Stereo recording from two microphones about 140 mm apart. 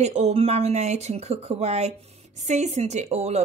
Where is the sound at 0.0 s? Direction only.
50° right (ahead or behind).